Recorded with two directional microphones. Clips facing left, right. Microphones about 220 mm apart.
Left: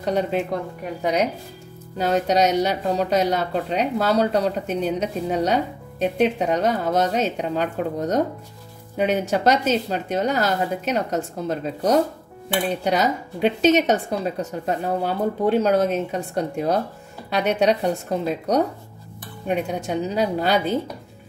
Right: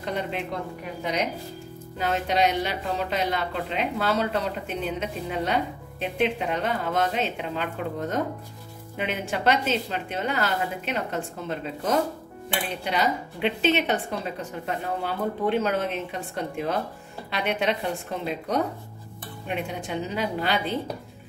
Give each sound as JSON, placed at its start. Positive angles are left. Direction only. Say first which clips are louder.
{"t": 0.0, "sound": "speech", "louder": "left 7 dB", "side_deg": 40}
{"t": 2.0, "sound": "speech", "louder": "left 5 dB", "side_deg": 40}